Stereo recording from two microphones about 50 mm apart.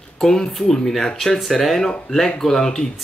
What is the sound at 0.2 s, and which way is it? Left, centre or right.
Speech, centre.